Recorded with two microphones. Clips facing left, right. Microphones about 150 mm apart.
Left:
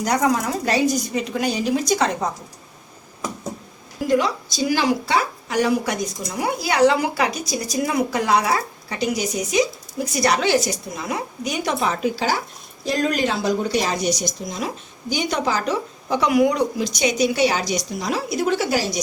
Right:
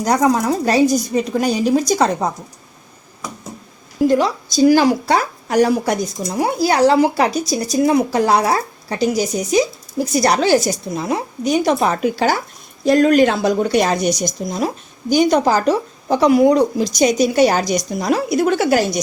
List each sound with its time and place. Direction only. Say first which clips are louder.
0.0 s speech: right 4 dB; 35° right (ahead or behind)
4.0 s speech: right 5 dB; 35° right (ahead or behind); by 19.0 s 55° right (ahead or behind)